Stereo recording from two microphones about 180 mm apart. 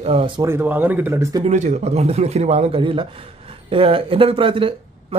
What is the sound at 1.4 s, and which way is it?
Speech, 40° right (ahead or behind).